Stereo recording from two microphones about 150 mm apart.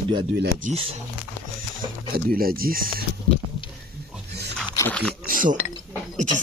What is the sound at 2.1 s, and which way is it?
Speech, 75° right (ahead or behind).